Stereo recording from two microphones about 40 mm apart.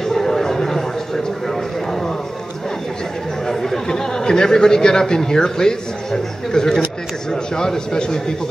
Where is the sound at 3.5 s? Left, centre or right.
Centre.